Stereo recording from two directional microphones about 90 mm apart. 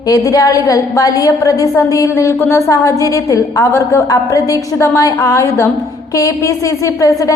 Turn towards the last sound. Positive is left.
turn(degrees=35)  # may be behind; listen again after turning